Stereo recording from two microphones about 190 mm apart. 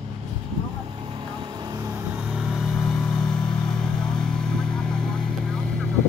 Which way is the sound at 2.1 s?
5° right (ahead or behind).